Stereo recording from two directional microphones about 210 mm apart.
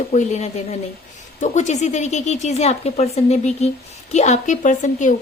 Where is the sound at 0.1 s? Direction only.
35° left (ahead or behind).